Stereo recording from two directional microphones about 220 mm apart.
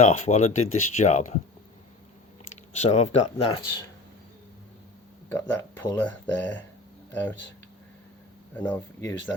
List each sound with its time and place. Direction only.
0.0 s speech: 30° left (ahead or behind)
2.8 s speech: 30° left (ahead or behind)
5.3 s speech: 10° left (ahead or behind)
8.5 s speech: 10° left (ahead or behind)